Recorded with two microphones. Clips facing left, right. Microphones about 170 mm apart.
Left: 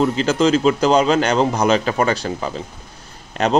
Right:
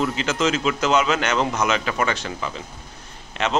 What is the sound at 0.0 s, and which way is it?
Speech, 35° left (ahead or behind).